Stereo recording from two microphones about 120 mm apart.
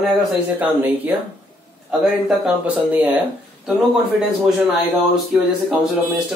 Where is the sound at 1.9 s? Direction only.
5° right (ahead or behind).